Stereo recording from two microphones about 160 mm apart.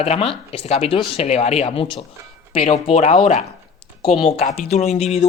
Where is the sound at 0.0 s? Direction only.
40° left (ahead or behind).